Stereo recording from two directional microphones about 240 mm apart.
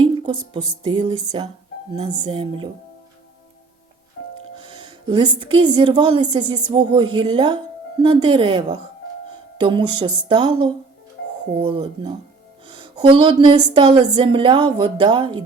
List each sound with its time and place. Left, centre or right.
0.5 s a woman's voice: centre
4.2 s music: left
5.0 s a woman's voice: centre